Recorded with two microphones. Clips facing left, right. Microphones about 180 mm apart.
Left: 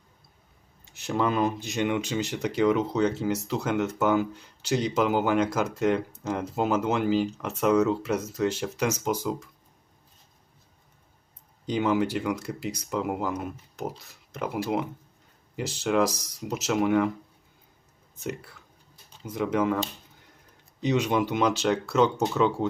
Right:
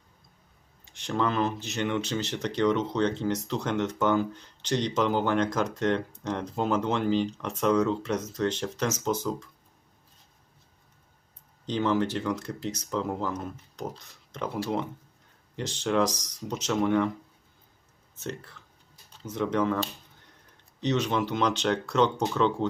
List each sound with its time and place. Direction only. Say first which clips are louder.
0.9 s speech: left 2 dB; 5° left (ahead or behind)
11.6 s speech: left 1 dB; 10° left (ahead or behind)
18.2 s speech: left 2 dB; 10° left (ahead or behind)
20.8 s speech: left 2 dB; 10° left (ahead or behind)